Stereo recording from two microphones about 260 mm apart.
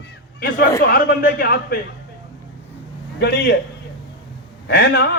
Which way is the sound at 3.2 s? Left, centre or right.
Left.